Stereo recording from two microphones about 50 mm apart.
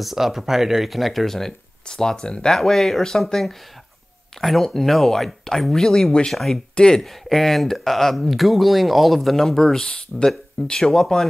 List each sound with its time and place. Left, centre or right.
0.0 s speech: centre
6.7 s speech: centre
7.0 s speech: centre